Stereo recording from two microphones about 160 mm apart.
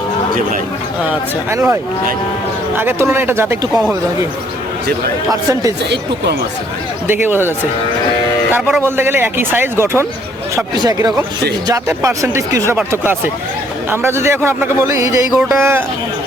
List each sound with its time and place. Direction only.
1.0 s speech: 15° right (ahead or behind)
5.3 s speech: 20° right (ahead or behind)
7.1 s speech: 10° right (ahead or behind)